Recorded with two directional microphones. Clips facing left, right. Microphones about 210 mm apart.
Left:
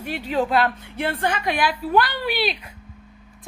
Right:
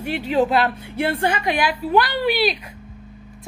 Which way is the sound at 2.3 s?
40° right (ahead or behind).